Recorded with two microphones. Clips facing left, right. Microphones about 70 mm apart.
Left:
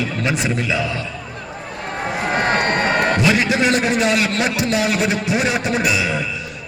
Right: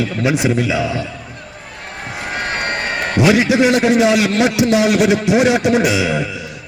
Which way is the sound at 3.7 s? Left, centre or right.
Centre.